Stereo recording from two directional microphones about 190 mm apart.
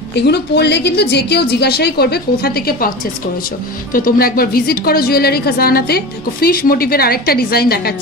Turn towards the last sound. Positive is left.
turn(degrees=55)  # may be behind; listen again after turning